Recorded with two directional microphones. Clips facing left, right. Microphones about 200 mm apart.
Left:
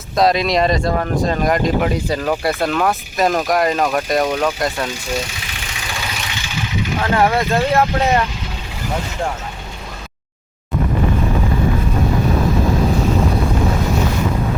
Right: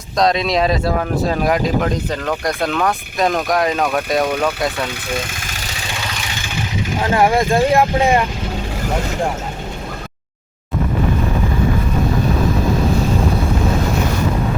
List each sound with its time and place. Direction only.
0.2 s speech: centre (ahead or behind)
1.9 s speech: 10° left (ahead or behind)
5.0 s vehicle: 55° right (ahead or behind)
7.0 s speech: 15° right (ahead or behind)